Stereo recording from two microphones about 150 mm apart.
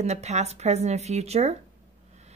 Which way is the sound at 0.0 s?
50° right (ahead or behind).